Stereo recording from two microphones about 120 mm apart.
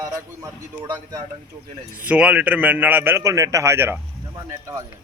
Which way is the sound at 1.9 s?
10° right (ahead or behind).